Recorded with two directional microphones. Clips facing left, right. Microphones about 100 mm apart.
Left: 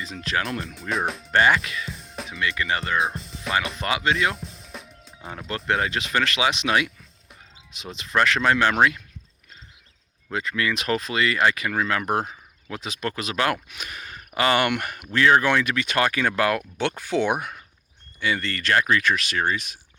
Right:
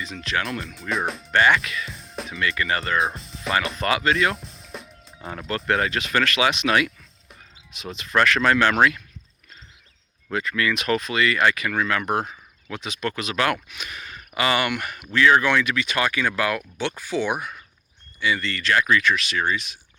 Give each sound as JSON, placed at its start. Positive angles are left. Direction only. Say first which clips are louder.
{"t": 0.0, "sound": "speech", "louder": "even", "side_deg": 35}
{"t": 0.8, "sound": "speech", "louder": "even", "side_deg": 0}
{"t": 1.3, "sound": "speech", "louder": "right 1 dB", "side_deg": 30}
{"t": 1.9, "sound": "music", "louder": "right 1 dB", "side_deg": 0}
{"t": 2.6, "sound": "speech", "louder": "right 1 dB", "side_deg": 15}
{"t": 2.8, "sound": "speech", "louder": "right 1 dB", "side_deg": 0}
{"t": 3.8, "sound": "speech", "louder": "right 4 dB", "side_deg": 15}
{"t": 4.1, "sound": "music", "louder": "right 2 dB", "side_deg": 5}
{"t": 5.6, "sound": "speech", "louder": "right 1 dB", "side_deg": 20}
{"t": 10.3, "sound": "speech", "louder": "right 2 dB", "side_deg": 25}
{"t": 13.7, "sound": "speech", "louder": "even", "side_deg": 45}
{"t": 15.1, "sound": "speech", "louder": "even", "side_deg": 40}